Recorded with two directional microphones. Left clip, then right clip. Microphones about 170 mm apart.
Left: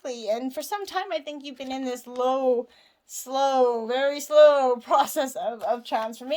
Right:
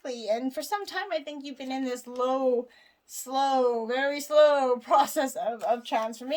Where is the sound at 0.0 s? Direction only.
40° left (ahead or behind).